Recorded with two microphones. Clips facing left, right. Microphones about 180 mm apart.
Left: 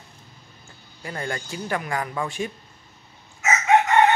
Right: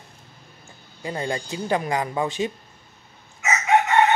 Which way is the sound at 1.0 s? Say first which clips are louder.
Right 3 dB; 20° right (ahead or behind).